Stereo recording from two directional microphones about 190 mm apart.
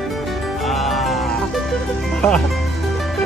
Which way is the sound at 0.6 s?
Centre (ahead or behind).